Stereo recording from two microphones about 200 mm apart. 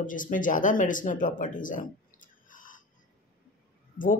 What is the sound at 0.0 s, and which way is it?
Speech, 40° left (ahead or behind).